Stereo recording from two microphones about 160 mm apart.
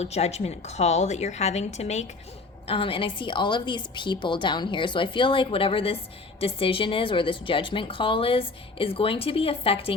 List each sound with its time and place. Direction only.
0.0 s a woman's voice: 40° left (ahead or behind)